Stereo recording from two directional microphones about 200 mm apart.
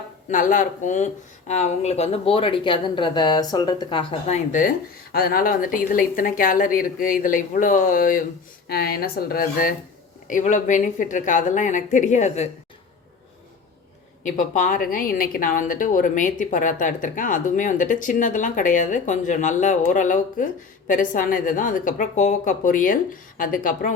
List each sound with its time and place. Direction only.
0.3 s a woman's voice: 40° left (ahead or behind)
14.3 s a woman's voice: 40° left (ahead or behind)